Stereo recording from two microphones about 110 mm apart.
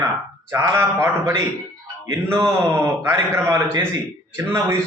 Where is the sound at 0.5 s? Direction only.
25° right (ahead or behind).